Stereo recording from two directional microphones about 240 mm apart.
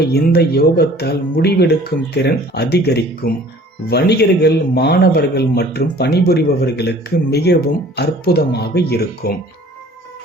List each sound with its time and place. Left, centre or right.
0.1 s speech: left